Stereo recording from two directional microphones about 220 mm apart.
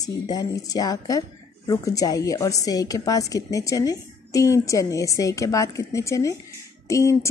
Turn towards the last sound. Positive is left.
turn(degrees=15)  # may be behind; listen again after turning